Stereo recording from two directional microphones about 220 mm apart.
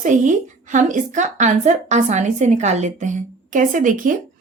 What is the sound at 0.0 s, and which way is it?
A woman's voice, 35° right (ahead or behind).